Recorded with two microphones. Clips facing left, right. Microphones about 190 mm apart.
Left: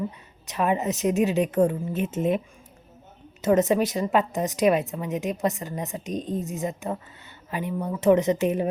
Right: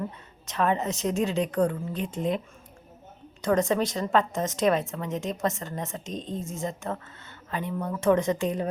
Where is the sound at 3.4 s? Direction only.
20° left (ahead or behind).